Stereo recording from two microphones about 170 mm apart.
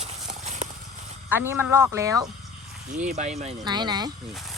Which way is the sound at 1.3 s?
10° right (ahead or behind).